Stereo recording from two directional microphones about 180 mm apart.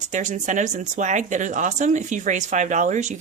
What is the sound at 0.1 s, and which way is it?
Speech, 45° right (ahead or behind).